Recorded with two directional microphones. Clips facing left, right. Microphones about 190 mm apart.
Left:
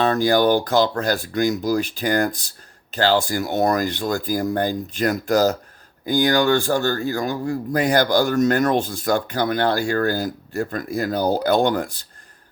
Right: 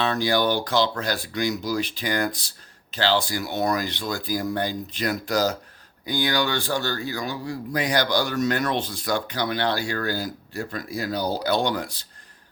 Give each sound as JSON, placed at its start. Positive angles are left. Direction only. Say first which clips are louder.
{"t": 0.0, "sound": "speech", "louder": "left 5 dB", "side_deg": 45}